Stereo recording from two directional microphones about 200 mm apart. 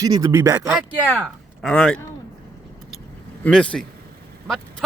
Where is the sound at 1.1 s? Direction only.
5° left (ahead or behind).